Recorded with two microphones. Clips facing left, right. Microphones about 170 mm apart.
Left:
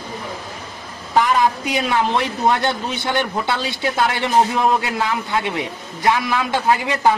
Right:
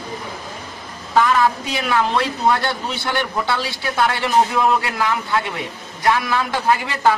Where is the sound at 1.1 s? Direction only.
15° left (ahead or behind).